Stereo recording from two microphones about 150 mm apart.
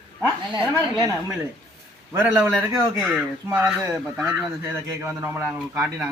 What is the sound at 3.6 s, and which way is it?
Speech, 15° right (ahead or behind).